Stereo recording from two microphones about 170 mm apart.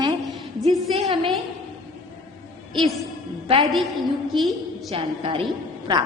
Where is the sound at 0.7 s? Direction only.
Centre (ahead or behind).